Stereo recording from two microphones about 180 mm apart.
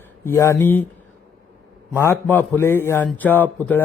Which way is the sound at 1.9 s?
10° left (ahead or behind).